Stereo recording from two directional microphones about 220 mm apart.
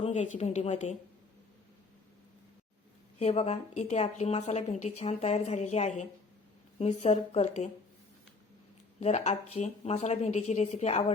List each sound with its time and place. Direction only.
0.0 s a woman's voice: 30° left (ahead or behind)
3.2 s a woman's voice: 30° left (ahead or behind)
9.0 s a woman's voice: 30° left (ahead or behind)